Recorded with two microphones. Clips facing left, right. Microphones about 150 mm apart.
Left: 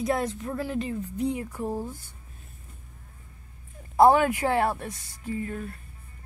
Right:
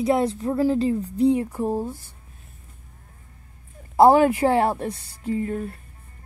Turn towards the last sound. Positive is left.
turn(degrees=-30)  # may be behind; listen again after turning